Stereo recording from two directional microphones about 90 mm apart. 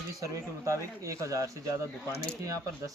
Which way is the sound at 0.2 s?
35° right (ahead or behind).